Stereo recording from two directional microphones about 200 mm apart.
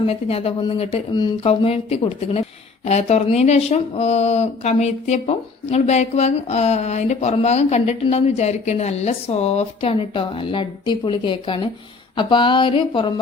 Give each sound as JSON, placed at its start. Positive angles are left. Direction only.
{"t": 0.0, "sound": "speech", "side_deg": 30}